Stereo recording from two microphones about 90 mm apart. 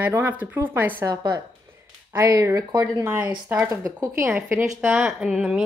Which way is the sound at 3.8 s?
35° right (ahead or behind).